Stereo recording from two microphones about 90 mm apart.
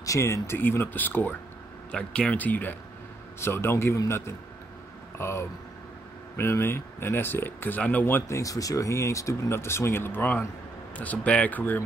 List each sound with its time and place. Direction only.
0.0 s speech: 35° left (ahead or behind)
8.4 s speech: 40° left (ahead or behind); by 11.8 s 20° left (ahead or behind)